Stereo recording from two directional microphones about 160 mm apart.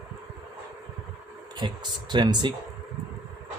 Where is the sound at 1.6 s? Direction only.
30° right (ahead or behind).